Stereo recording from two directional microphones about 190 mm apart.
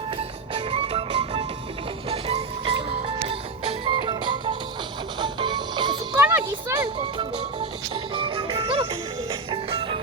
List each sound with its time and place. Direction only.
0.2 s music: 30° right (ahead or behind)
6.1 s music: 10° right (ahead or behind)
7.2 s music: 25° right (ahead or behind)